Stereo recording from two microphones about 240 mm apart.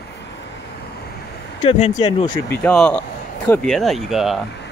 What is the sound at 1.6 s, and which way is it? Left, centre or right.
Speech, left.